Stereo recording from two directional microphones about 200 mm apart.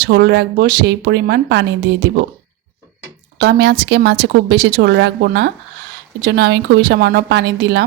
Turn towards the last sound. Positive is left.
turn(degrees=-60)  # may be behind; listen again after turning